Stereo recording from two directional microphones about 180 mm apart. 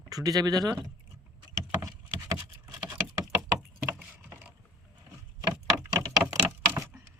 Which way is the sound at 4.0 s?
10° right (ahead or behind).